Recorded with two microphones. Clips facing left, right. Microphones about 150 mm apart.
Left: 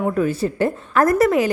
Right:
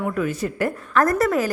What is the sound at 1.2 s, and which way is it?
Speech, centre (ahead or behind).